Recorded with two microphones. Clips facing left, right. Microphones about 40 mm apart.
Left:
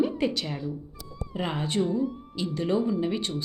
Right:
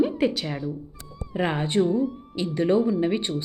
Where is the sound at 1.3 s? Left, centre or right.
Right.